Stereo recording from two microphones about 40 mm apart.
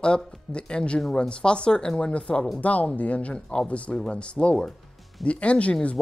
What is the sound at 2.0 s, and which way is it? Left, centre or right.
Speech, left.